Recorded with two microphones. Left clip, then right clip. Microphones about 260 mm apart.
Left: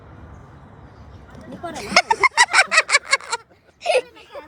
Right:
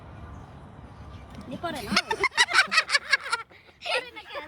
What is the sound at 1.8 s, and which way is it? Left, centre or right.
Speech, left.